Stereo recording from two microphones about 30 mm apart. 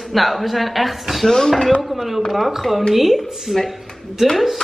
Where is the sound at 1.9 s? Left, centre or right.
Centre.